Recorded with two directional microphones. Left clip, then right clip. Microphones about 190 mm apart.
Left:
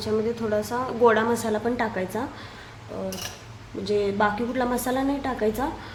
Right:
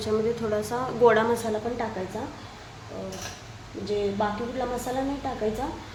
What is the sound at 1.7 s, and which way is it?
Speech, 25° left (ahead or behind).